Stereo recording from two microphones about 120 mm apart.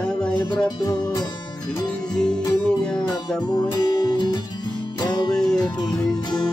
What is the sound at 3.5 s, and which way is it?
Music, 35° left (ahead or behind).